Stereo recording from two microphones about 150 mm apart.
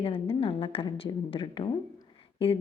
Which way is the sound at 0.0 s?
40° left (ahead or behind).